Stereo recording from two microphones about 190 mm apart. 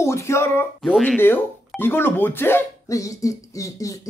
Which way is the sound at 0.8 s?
Centre (ahead or behind).